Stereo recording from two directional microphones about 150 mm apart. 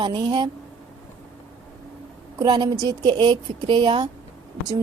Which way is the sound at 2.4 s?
30° right (ahead or behind).